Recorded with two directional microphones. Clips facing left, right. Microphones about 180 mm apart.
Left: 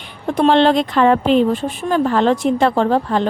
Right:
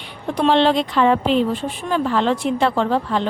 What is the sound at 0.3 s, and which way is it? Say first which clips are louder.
A woman's voice: left 3 dB; 50° left (ahead or behind).